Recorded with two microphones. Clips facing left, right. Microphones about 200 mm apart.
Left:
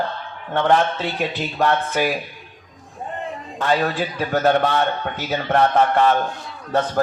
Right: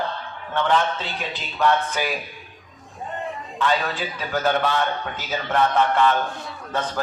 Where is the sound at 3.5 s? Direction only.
45° left (ahead or behind).